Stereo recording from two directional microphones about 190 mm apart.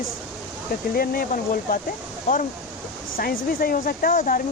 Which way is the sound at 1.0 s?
50° left (ahead or behind).